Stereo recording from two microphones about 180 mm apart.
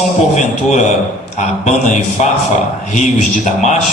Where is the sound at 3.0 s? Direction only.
40° left (ahead or behind).